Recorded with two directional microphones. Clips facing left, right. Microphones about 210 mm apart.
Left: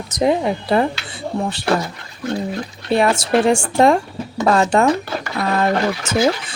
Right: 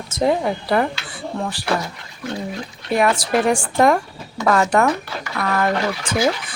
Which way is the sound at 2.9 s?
25° left (ahead or behind).